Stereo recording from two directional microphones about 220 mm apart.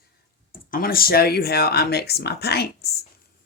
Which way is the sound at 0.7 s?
40° left (ahead or behind).